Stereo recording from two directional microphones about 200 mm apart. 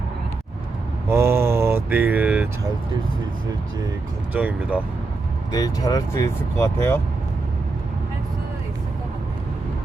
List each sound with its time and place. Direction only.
1.0 s vehicle: 10° right (ahead or behind)
4.4 s speech: 5° right (ahead or behind)
5.5 s speech: 20° left (ahead or behind)